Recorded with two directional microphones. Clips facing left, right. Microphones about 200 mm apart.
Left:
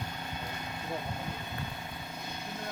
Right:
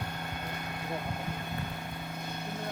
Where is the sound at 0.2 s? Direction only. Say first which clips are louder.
Right 1 dB; 55° right (ahead or behind).